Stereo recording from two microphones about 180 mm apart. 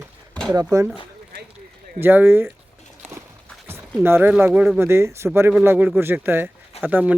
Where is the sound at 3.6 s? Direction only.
15° right (ahead or behind).